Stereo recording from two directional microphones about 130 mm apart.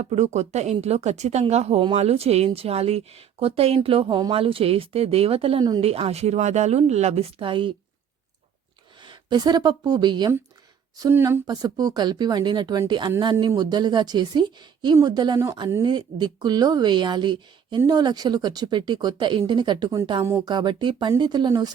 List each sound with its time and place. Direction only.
0.0 s a woman's voice: 60° right (ahead or behind); by 7.7 s 40° right (ahead or behind)
9.0 s speech: 35° right (ahead or behind)
11.1 s speech: 20° right (ahead or behind); by 20.0 s 35° right (ahead or behind)
20.2 s speech: 25° right (ahead or behind)
20.5 s speech: 35° right (ahead or behind)